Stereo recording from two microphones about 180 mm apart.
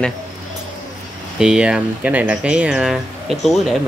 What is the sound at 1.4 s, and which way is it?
Speech, 5° right (ahead or behind).